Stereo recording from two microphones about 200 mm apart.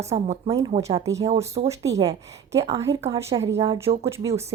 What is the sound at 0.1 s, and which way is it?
Speech, 30° right (ahead or behind).